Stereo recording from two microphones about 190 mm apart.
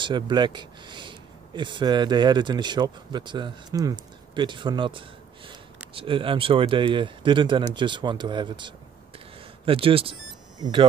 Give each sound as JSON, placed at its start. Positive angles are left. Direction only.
{"t": 0.0, "sound": "speech", "side_deg": -25}